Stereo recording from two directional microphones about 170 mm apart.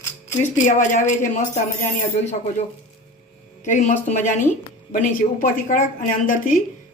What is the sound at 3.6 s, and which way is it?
Speech, 45° left (ahead or behind).